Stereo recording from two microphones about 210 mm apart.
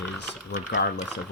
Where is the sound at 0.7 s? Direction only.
55° left (ahead or behind).